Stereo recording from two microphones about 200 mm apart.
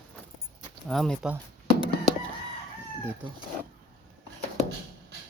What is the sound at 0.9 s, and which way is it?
Speech, centre (ahead or behind).